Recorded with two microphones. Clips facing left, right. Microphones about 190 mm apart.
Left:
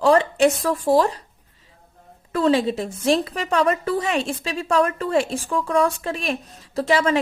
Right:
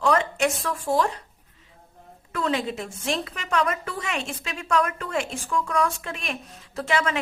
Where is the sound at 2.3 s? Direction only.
35° left (ahead or behind).